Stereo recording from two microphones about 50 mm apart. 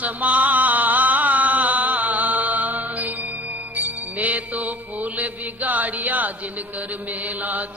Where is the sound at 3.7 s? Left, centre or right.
Right.